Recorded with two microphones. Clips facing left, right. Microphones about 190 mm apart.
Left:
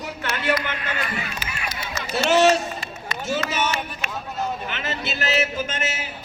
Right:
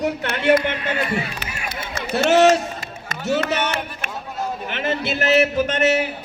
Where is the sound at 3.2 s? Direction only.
65° right (ahead or behind).